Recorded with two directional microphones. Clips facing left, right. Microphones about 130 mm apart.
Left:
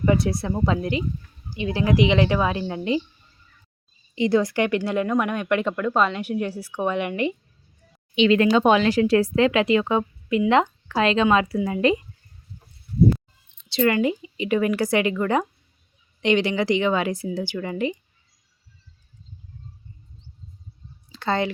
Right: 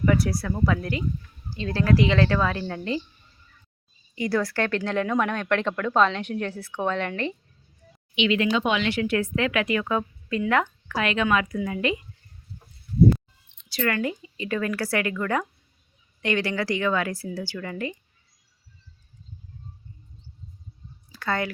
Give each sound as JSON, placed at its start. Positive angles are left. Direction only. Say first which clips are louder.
{"t": 0.0, "sound": "speech", "louder": "left 2 dB", "side_deg": 25}
{"t": 4.1, "sound": "speech", "louder": "left 5 dB", "side_deg": 20}
{"t": 8.1, "sound": "speech", "louder": "left 6 dB", "side_deg": 40}
{"t": 10.8, "sound": "speech", "louder": "left 5 dB", "side_deg": 30}
{"t": 13.7, "sound": "speech", "louder": "left 6 dB", "side_deg": 25}
{"t": 21.1, "sound": "a sound", "louder": "left 4 dB", "side_deg": 25}